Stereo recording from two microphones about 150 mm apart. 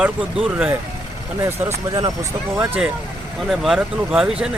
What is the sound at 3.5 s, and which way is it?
Speech, centre (ahead or behind).